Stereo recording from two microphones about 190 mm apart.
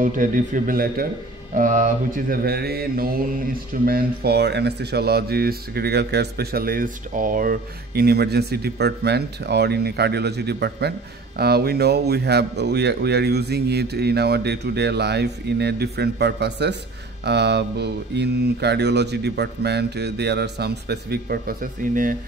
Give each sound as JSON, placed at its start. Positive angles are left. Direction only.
{"t": 0.0, "sound": "speech", "side_deg": -45}